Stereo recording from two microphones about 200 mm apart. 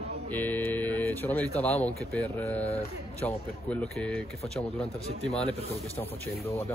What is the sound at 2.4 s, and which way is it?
A man's voice, 10° left (ahead or behind).